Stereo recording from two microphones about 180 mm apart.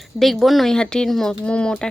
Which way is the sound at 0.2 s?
Centre (ahead or behind).